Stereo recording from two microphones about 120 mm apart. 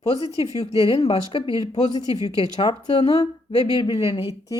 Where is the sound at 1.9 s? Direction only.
35° left (ahead or behind).